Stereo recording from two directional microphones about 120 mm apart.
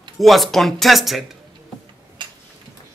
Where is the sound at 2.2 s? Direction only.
40° right (ahead or behind).